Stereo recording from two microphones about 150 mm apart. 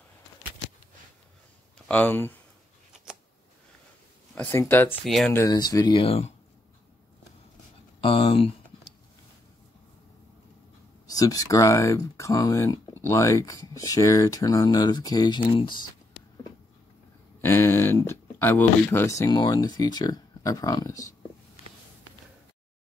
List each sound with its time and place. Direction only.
1.9 s speech: 10° left (ahead or behind)
4.4 s speech: 15° left (ahead or behind)
5.0 s speech: centre (ahead or behind)
5.3 s speech: 20° left (ahead or behind)
6.0 s speech: 40° left (ahead or behind)
8.0 s speech: 35° left (ahead or behind)
11.1 s speech: 25° left (ahead or behind)
17.4 s speech: 15° left (ahead or behind)